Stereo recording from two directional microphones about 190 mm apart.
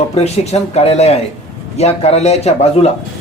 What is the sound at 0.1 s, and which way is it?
A man's voice, 35° left (ahead or behind).